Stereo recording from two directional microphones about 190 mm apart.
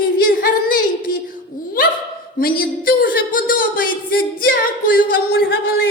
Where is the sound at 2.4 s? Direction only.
50° left (ahead or behind).